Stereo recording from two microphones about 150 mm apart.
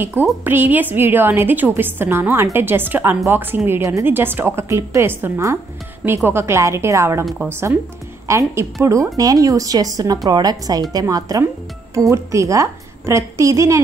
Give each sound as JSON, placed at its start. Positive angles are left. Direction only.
{"t": 0.0, "sound": "a woman's voice", "side_deg": -15}
{"t": 8.3, "sound": "speech", "side_deg": -20}